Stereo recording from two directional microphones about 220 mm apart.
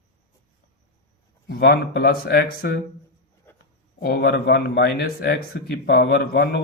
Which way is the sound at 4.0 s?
45° left (ahead or behind).